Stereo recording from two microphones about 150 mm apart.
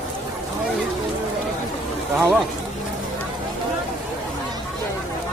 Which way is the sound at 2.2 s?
Centre (ahead or behind).